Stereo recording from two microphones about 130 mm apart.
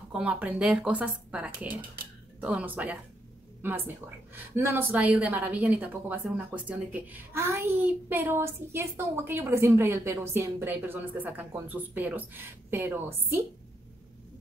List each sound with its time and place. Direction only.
0.1 s a woman's voice: 10° right (ahead or behind)